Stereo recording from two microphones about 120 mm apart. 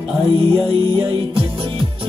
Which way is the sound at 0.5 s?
45° right (ahead or behind).